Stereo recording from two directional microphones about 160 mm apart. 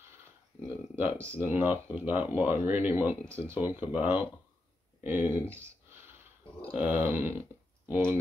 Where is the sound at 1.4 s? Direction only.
10° right (ahead or behind).